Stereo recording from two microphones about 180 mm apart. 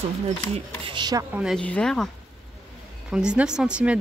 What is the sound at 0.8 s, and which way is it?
Speech, 25° right (ahead or behind).